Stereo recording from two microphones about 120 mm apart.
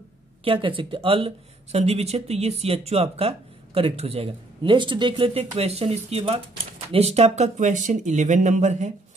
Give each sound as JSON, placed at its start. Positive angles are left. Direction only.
{"t": 0.4, "sound": "speech", "side_deg": -50}